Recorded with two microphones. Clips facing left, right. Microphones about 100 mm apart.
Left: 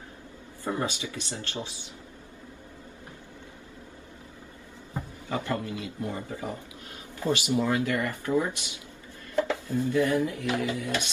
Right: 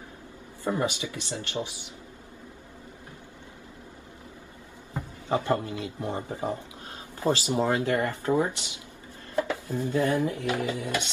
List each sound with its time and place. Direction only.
0.7 s speech: 20° right (ahead or behind)
5.3 s speech: 25° right (ahead or behind)
9.3 s a sound: 20° right (ahead or behind)
9.9 s speech: 25° right (ahead or behind)